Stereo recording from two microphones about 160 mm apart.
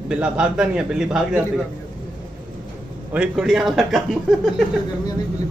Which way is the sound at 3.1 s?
5° right (ahead or behind).